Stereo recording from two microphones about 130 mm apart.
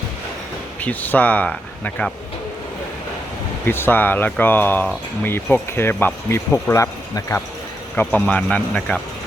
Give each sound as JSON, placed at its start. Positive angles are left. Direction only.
{"t": 0.8, "sound": "speech", "side_deg": 10}
{"t": 3.7, "sound": "speech", "side_deg": 15}